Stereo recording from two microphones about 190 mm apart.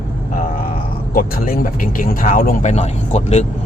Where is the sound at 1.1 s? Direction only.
50° left (ahead or behind).